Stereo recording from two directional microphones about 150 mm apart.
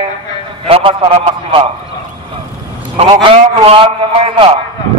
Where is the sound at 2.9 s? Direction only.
35° right (ahead or behind).